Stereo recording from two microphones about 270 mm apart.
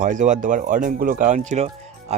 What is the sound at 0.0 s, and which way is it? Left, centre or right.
Speech, right.